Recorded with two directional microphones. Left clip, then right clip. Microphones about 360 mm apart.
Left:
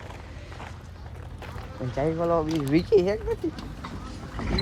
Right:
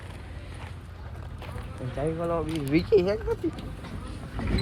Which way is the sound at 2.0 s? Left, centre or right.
Left.